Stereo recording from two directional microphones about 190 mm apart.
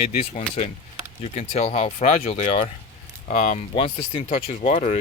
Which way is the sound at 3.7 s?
30° left (ahead or behind).